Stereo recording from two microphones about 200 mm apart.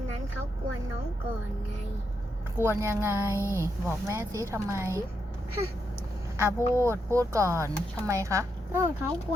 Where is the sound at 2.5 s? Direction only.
10° right (ahead or behind).